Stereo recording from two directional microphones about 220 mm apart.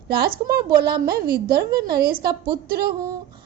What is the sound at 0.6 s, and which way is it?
Speech, 20° right (ahead or behind).